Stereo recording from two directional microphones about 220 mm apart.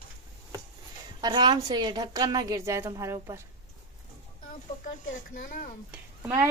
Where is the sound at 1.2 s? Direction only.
20° right (ahead or behind).